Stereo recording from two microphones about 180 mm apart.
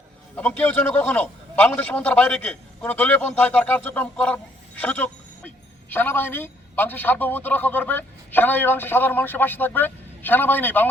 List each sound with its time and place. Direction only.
0.3 s a man's voice: 10° left (ahead or behind)